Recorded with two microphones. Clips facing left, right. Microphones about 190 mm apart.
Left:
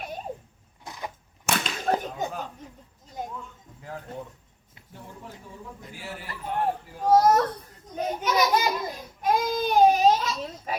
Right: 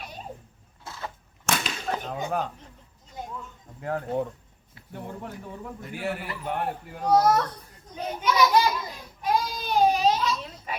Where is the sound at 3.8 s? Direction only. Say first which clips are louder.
Right 10 dB; 60° right (ahead or behind).